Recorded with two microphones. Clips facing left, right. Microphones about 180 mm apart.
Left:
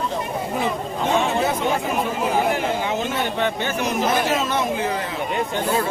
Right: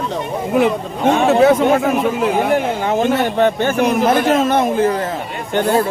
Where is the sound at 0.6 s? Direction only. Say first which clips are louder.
Right 9 dB; 75° right (ahead or behind).